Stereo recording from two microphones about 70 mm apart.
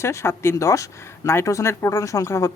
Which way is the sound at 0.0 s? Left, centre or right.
Left.